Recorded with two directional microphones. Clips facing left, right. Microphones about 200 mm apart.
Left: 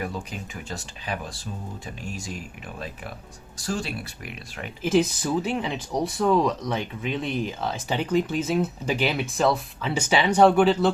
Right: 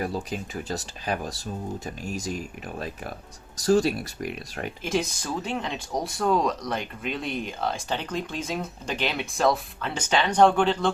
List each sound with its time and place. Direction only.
0.0 s speech: 35° right (ahead or behind)
3.6 s speech: 40° right (ahead or behind)
4.8 s speech: 5° left (ahead or behind)